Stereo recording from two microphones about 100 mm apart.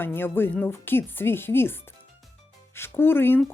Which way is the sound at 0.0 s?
20° left (ahead or behind).